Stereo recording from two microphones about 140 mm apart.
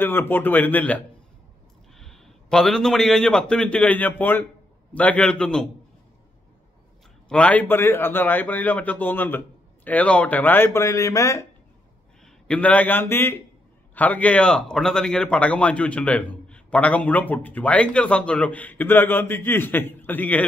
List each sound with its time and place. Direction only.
0.0 s a man's voice: 15° left (ahead or behind)
7.2 s speech: 10° left (ahead or behind)
12.4 s speech: 10° left (ahead or behind)